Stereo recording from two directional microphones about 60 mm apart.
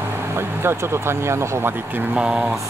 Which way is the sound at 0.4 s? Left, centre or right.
Right.